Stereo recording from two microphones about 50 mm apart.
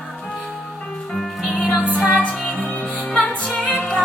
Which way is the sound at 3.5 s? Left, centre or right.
Centre.